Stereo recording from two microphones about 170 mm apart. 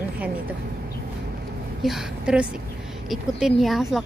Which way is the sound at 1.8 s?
Centre (ahead or behind).